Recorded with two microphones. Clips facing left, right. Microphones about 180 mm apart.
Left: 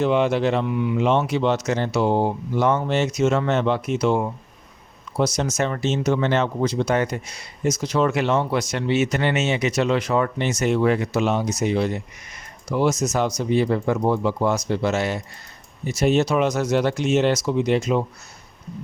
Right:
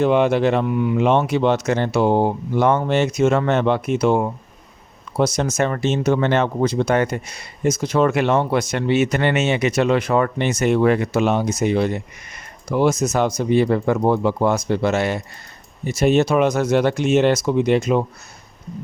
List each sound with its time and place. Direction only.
0.0 s speech: 55° right (ahead or behind)